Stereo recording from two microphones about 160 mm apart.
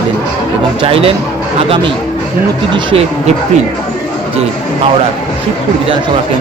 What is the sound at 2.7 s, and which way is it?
Speech, 35° right (ahead or behind).